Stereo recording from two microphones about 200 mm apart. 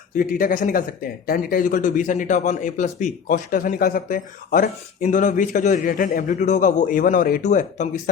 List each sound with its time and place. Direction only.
0.2 s a man's voice: 45° left (ahead or behind)